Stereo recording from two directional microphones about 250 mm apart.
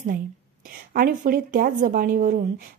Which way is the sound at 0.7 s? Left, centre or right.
Right.